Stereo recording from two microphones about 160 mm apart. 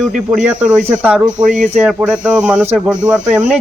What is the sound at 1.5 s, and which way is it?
Speech, 50° right (ahead or behind).